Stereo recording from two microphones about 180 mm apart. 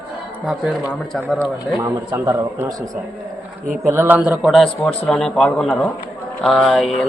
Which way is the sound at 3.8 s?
10° right (ahead or behind).